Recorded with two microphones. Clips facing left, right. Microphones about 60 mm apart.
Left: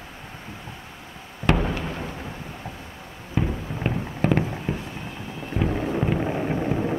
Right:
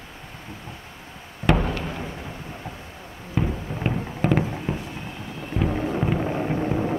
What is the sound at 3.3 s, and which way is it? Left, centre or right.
Fireworks, centre.